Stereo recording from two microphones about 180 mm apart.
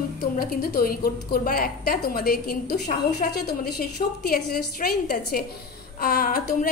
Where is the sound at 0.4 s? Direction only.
55° left (ahead or behind).